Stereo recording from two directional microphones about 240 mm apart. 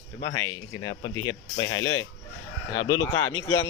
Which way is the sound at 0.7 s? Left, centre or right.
Centre.